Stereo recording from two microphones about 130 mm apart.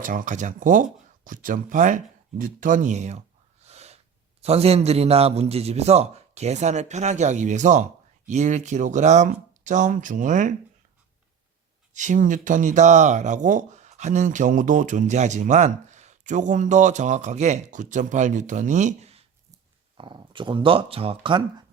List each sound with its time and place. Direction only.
0.0 s speech: 90° right
11.9 s speech: 80° right; by 19.2 s 55° right (ahead or behind)
20.0 s speech: 40° right (ahead or behind)